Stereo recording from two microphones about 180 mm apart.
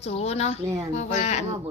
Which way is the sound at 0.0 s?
35° left (ahead or behind).